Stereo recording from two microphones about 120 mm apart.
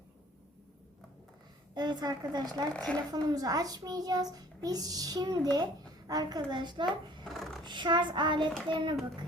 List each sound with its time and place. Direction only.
1.7 s a child's voice: 35° right (ahead or behind)
2.7 s a woman's voice: 10° left (ahead or behind)
3.1 s a child's voice: 35° right (ahead or behind)
7.3 s a sound: centre (ahead or behind)
7.6 s a child's voice: 40° right (ahead or behind)